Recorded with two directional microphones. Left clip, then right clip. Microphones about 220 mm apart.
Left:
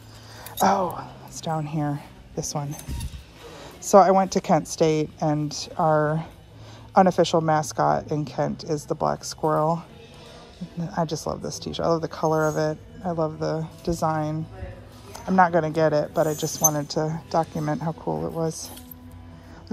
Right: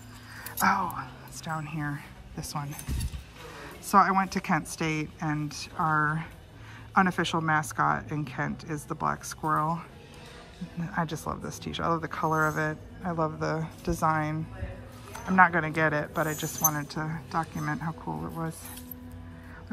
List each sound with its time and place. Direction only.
0.6 s a woman's voice: 30° left (ahead or behind)